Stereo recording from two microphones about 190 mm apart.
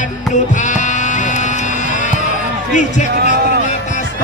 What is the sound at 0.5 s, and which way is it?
Sheep, 40° left (ahead or behind).